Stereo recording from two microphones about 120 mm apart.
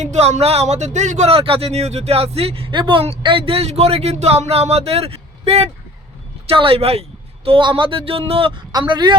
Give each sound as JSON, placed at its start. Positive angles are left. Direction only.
{"t": 0.0, "sound": "speech", "side_deg": -70}
{"t": 1.3, "sound": "speech", "side_deg": -50}
{"t": 7.4, "sound": "speech", "side_deg": -45}
{"t": 8.7, "sound": "speech", "side_deg": -40}